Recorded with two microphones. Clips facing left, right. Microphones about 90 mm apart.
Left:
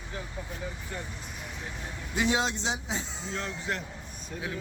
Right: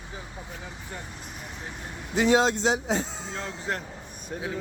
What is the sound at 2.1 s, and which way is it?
Speech, 40° right (ahead or behind).